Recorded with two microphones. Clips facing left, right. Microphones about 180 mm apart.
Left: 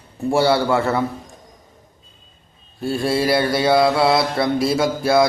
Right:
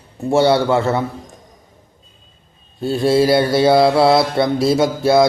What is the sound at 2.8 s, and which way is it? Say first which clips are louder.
Mantra: right 5 dB; 25° right (ahead or behind).